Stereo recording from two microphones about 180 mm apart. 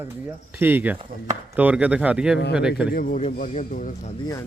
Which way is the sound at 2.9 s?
50° left (ahead or behind).